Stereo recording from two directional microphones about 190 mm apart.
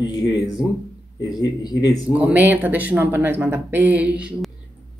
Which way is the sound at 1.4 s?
20° left (ahead or behind).